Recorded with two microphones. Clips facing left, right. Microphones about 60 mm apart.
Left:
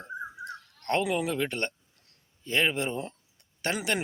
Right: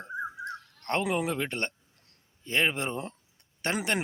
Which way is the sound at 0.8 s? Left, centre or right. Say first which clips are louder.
Left 1 dB; right.